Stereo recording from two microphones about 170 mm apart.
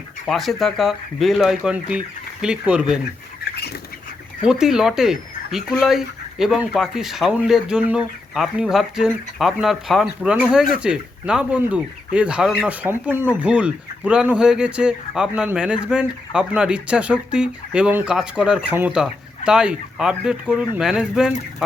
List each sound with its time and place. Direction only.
0.3 s speech: centre (ahead or behind)
3.5 s duck: 70° left (ahead or behind)
4.4 s speech: 5° right (ahead or behind)